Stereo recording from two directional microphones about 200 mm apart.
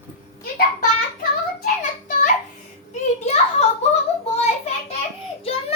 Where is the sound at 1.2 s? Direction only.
40° left (ahead or behind).